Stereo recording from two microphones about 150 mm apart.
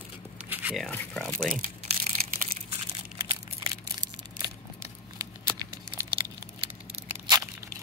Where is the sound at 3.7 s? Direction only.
25° right (ahead or behind).